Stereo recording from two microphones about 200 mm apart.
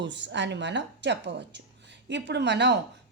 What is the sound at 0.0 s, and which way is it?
A woman's voice, 65° right (ahead or behind).